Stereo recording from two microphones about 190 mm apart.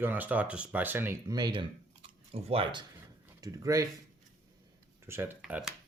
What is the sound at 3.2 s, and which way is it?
Speech, 15° right (ahead or behind).